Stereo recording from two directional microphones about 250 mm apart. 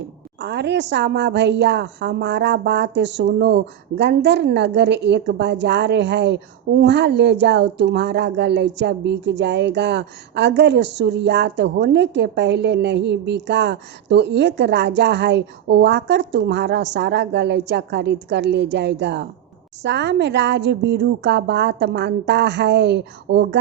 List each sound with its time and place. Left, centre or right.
0.3 s a woman's voice: right